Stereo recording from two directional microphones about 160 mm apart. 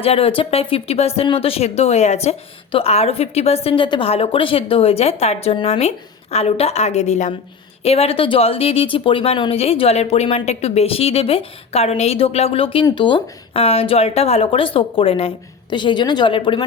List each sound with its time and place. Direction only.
0.0 s a woman's voice: 35° left (ahead or behind)